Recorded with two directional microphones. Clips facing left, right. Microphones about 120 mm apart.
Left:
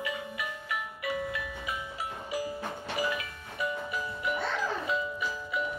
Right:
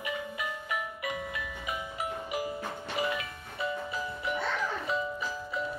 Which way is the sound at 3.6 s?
25° right (ahead or behind).